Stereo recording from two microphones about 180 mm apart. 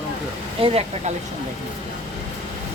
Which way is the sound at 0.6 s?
35° right (ahead or behind).